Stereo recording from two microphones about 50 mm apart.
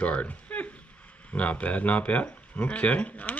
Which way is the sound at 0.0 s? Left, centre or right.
Left.